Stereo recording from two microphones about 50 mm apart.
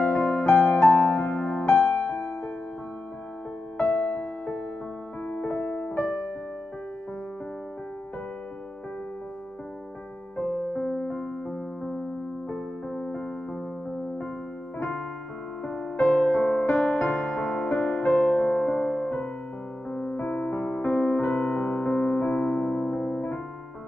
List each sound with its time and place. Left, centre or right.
0.0 s music: left
0.3 s music: left
4.1 s music: left
5.2 s music: left
10.3 s music: centre
14.8 s piano: left
15.6 s music: centre